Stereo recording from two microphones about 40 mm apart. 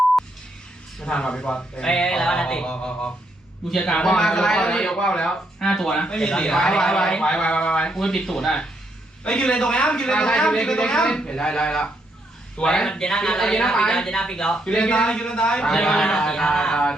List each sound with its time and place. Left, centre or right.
1.0 s speech: left
7.9 s speech: centre
9.2 s speech: left